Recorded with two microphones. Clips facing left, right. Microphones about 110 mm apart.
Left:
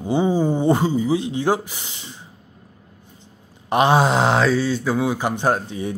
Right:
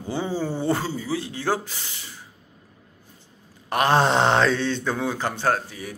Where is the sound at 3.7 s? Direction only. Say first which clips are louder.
Left 4 dB; 20° left (ahead or behind).